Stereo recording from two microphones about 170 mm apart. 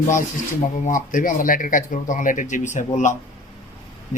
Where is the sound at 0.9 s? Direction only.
50° left (ahead or behind).